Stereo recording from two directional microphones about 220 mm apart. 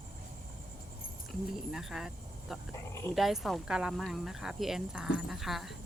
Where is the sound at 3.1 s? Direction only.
Centre (ahead or behind).